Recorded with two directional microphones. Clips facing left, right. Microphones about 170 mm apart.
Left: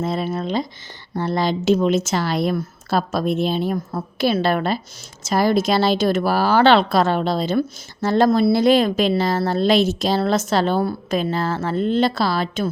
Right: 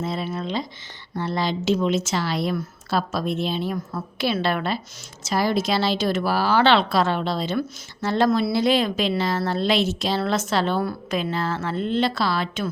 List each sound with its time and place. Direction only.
0.0 s a woman's voice: 50° left (ahead or behind)